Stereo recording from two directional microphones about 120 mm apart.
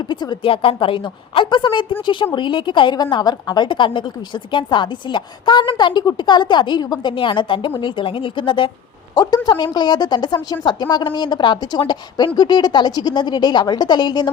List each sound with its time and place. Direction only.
0.0 s a woman's voice: 40° left (ahead or behind)
9.1 s a woman's voice: 35° left (ahead or behind)